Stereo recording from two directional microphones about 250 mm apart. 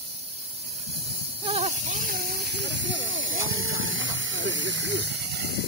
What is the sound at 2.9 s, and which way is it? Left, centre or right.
Hiss, right.